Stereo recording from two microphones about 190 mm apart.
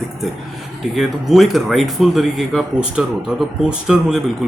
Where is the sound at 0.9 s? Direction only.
Centre (ahead or behind).